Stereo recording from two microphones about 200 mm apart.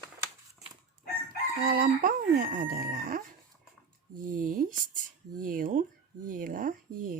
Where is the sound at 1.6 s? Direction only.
45° right (ahead or behind).